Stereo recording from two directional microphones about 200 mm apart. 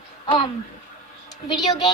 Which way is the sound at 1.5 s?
20° left (ahead or behind).